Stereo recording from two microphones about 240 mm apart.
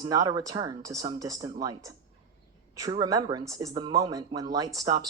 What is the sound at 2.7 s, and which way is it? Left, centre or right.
Speech, centre.